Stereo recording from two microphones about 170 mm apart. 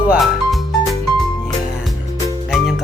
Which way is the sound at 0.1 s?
Centre (ahead or behind).